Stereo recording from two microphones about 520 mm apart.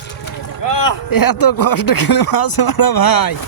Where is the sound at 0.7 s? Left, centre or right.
Left.